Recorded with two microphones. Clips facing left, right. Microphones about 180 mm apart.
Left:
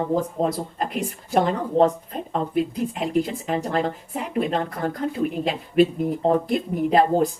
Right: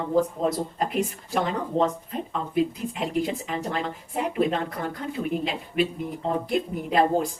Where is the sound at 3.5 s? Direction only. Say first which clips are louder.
Left 5 dB; 40° left (ahead or behind).